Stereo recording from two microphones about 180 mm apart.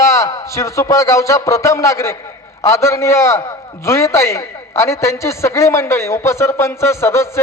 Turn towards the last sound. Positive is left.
turn(degrees=15)  # may be behind; listen again after turning